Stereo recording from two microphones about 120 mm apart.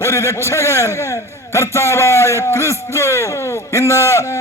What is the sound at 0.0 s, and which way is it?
A man's voice, 25° left (ahead or behind).